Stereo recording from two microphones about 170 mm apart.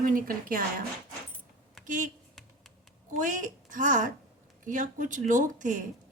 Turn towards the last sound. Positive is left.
turn(degrees=-50)  # may be behind; listen again after turning